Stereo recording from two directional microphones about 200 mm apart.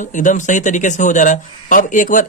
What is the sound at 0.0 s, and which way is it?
Speech, 40° left (ahead or behind).